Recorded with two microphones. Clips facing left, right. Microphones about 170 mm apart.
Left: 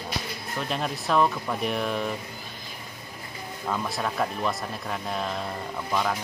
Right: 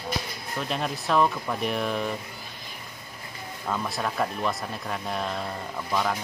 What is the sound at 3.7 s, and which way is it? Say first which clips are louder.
Speech: even; centre (ahead or behind).